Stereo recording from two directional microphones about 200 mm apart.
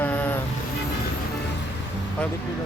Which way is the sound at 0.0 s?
10° left (ahead or behind).